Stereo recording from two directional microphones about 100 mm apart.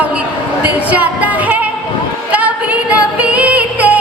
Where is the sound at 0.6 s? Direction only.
15° right (ahead or behind).